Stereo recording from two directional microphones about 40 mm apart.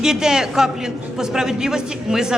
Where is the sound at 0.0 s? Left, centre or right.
Centre.